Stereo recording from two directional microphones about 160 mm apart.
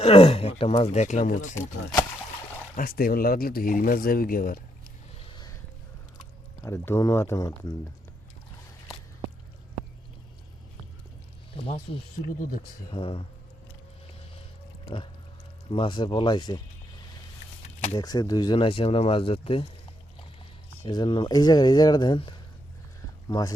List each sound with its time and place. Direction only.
0.0 s speech: 40° left (ahead or behind)
2.7 s speech: 65° left (ahead or behind)
5.2 s a sound: 30° left (ahead or behind)
6.6 s speech: 20° left (ahead or behind)
11.5 s speech: 35° left (ahead or behind)
14.8 s a sound: 35° left (ahead or behind)
15.7 s speech: 30° left (ahead or behind)
17.9 s speech: 25° left (ahead or behind)
20.8 s speech: 30° left (ahead or behind)